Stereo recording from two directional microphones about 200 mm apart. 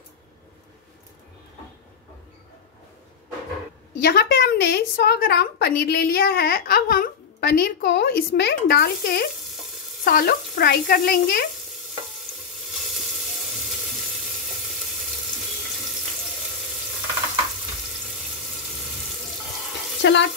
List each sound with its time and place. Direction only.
4.0 s a woman's voice: 50° left (ahead or behind)
20.0 s frying: 65° left (ahead or behind)